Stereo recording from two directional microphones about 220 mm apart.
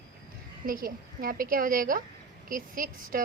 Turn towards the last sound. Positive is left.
turn(degrees=-40)  # may be behind; listen again after turning